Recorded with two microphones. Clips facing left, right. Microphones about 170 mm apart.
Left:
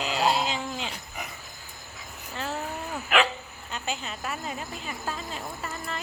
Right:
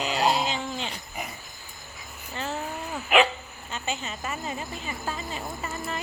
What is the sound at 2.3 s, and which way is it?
Speech, centre (ahead or behind).